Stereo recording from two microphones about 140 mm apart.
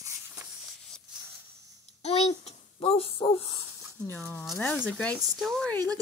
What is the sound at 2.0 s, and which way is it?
Speech, 50° left (ahead or behind).